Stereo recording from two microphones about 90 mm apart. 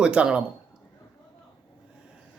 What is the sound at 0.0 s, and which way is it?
Speech, 10° right (ahead or behind).